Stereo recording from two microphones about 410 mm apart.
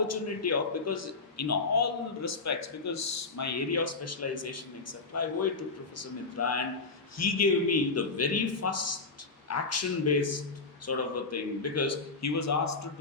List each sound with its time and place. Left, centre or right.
0.1 s a man's voice: left